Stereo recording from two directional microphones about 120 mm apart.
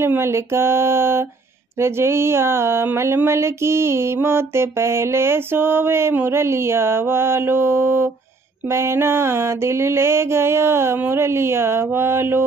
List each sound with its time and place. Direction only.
0.0 s speech: 20° right (ahead or behind)